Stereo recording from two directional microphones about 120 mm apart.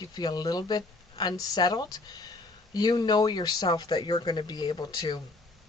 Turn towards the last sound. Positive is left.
turn(degrees=35)  # may be behind; listen again after turning